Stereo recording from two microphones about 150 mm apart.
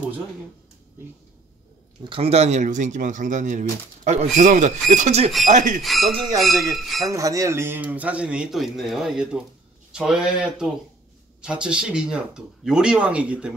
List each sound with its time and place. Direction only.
2.0 s speech: 40° right (ahead or behind); by 5.8 s 55° right (ahead or behind)
5.8 s speech: centre (ahead or behind)
7.1 s speech: 20° right (ahead or behind); by 13.6 s 5° right (ahead or behind)